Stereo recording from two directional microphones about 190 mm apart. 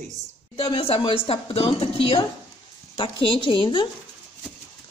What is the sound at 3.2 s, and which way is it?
Speech, 25° left (ahead or behind).